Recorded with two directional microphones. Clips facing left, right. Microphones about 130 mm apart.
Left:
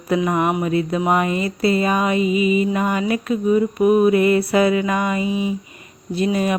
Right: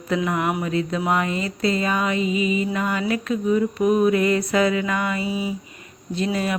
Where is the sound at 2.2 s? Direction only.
30° right (ahead or behind).